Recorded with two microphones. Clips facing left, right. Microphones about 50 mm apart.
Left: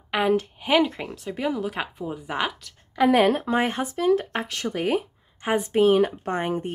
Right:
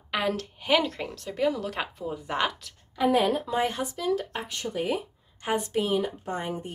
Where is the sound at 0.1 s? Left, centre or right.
Centre.